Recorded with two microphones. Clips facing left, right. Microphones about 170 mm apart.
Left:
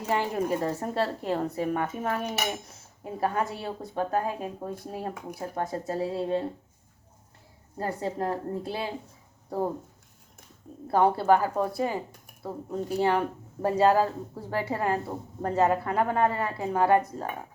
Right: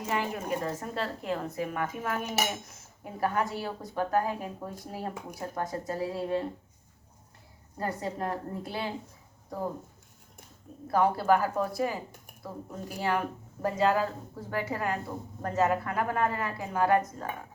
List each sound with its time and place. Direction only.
0.1 s speech: 35° left (ahead or behind)
7.8 s speech: 25° left (ahead or behind)
10.9 s speech: 25° left (ahead or behind)